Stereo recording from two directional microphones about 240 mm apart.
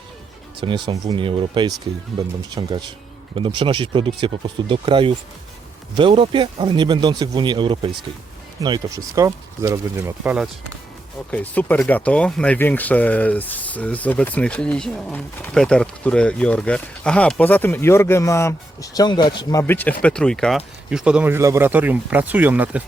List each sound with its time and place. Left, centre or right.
0.6 s speech: centre
11.3 s speech: centre